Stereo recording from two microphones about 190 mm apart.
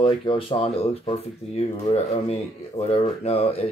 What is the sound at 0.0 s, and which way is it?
Speech, 25° left (ahead or behind).